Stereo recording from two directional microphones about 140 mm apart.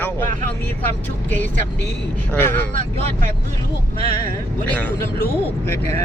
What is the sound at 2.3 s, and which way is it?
Speech, 15° left (ahead or behind).